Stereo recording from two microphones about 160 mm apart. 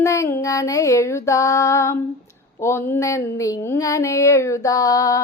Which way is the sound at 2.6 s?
15° left (ahead or behind).